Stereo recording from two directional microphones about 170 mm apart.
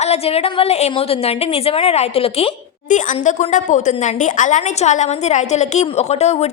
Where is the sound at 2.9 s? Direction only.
45° left (ahead or behind).